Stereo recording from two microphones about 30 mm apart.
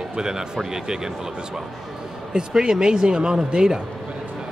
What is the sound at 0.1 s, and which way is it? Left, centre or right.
Speech, right.